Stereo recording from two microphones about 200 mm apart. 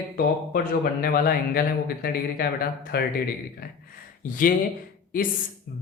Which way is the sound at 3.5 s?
45° left (ahead or behind).